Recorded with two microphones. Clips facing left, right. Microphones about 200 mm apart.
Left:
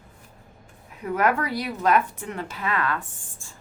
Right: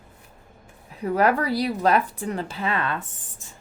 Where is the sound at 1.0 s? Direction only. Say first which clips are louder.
Right 2 dB; 35° right (ahead or behind).